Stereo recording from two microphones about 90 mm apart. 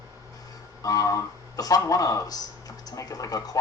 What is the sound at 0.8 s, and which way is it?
Speech, 40° left (ahead or behind).